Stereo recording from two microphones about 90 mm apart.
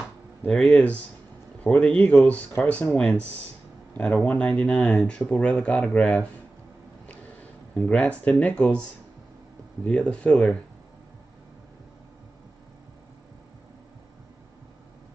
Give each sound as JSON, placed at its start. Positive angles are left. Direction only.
{"t": 0.5, "sound": "speech", "side_deg": 5}
{"t": 7.7, "sound": "speech", "side_deg": 10}
{"t": 9.8, "sound": "speech", "side_deg": 10}